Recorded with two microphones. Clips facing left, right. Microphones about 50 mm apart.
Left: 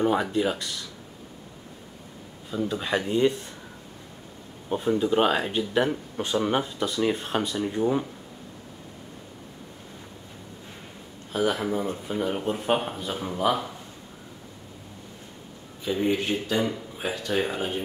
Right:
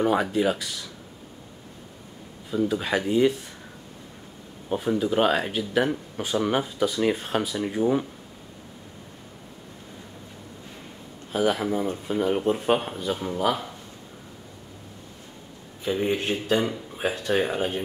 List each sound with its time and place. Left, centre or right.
0.0 s speech: centre
2.5 s speech: centre
3.1 s speech: centre
4.6 s speech: centre
11.3 s speech: centre
15.8 s speech: right
16.2 s speech: right
17.3 s speech: right